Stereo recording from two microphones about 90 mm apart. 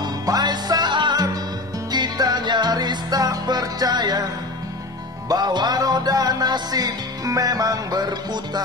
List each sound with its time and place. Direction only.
0.0 s music: 50° right (ahead or behind)
5.3 s music: 50° right (ahead or behind)